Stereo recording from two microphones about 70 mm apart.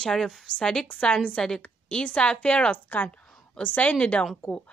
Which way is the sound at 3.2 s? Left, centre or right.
Centre.